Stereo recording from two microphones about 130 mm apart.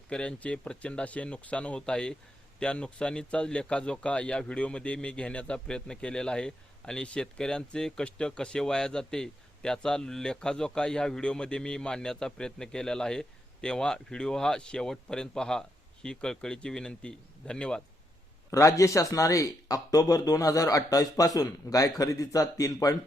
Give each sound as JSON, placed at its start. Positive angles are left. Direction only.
{"t": 0.1, "sound": "a man's voice", "side_deg": 10}
{"t": 18.5, "sound": "speech", "side_deg": 25}